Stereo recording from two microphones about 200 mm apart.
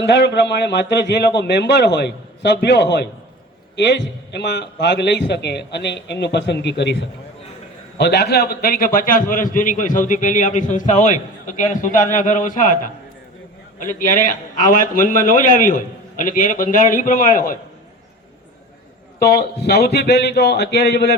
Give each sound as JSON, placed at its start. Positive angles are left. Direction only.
{"t": 0.1, "sound": "a man's voice", "side_deg": 60}
{"t": 19.2, "sound": "speech", "side_deg": 50}